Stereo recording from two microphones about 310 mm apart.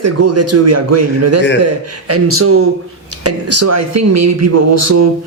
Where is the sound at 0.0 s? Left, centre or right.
Right.